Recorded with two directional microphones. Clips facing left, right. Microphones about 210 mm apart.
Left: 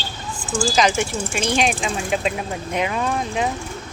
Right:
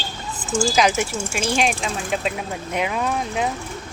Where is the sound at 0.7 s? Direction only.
5° right (ahead or behind).